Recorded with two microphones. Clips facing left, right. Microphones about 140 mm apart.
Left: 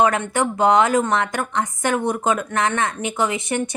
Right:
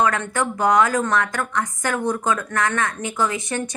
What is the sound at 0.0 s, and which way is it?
A woman's voice, 20° left (ahead or behind).